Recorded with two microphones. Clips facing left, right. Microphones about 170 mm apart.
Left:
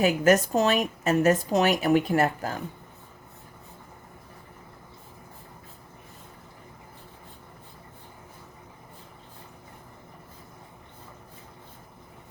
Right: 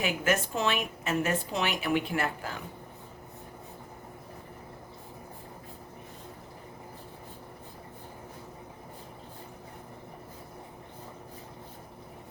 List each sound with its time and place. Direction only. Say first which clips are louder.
0.0 s a woman's voice: left 8 dB; 40° left (ahead or behind)